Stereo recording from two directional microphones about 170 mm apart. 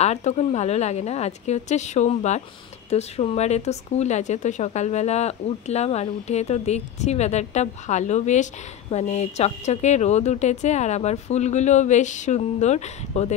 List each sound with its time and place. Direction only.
0.0 s speech: 40° left (ahead or behind)